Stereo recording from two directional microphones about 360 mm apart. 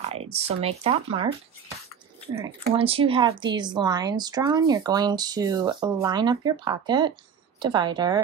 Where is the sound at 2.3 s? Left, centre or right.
Centre.